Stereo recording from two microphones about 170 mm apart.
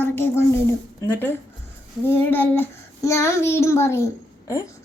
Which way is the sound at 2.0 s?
10° left (ahead or behind).